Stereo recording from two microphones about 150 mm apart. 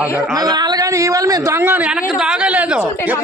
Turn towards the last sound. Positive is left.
turn(degrees=-10)  # may be behind; listen again after turning